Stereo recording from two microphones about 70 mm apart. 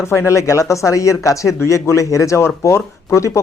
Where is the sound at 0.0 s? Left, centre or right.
Left.